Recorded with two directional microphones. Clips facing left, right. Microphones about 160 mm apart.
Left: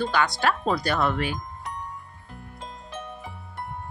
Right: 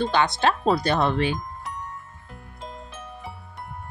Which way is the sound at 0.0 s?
25° right (ahead or behind).